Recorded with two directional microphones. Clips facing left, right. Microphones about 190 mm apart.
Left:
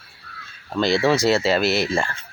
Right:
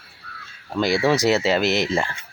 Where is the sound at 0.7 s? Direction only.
10° right (ahead or behind).